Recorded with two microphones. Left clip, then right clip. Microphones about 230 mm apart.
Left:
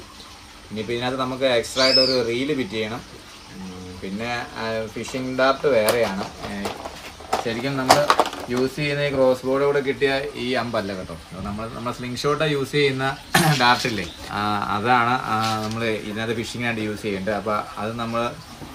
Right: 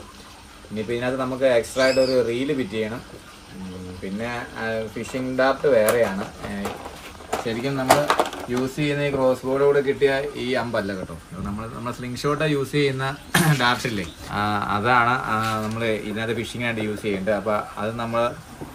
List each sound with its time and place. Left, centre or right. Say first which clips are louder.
0.8 s speech: even; centre
4.2 s speech: left 2 dB; centre